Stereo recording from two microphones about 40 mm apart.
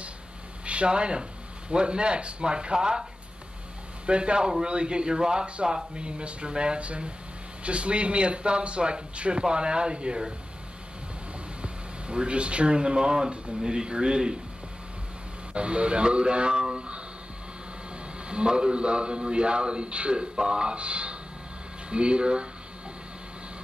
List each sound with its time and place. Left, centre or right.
0.7 s speech: right
11.6 s speech: right
15.5 s speech: right
18.3 s speech: right